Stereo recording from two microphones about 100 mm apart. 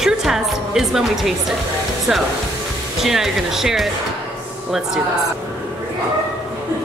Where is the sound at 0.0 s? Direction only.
5° right (ahead or behind).